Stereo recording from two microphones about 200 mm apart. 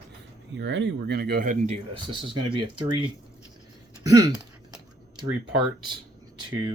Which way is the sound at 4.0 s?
15° right (ahead or behind).